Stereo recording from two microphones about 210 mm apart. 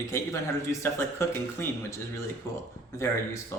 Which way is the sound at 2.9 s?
15° left (ahead or behind).